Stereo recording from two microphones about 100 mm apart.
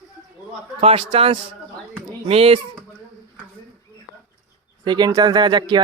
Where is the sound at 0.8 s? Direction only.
65° right (ahead or behind).